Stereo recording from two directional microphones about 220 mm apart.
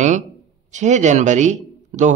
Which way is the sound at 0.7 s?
35° right (ahead or behind).